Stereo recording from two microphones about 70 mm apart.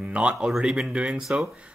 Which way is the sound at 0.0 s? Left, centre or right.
Centre.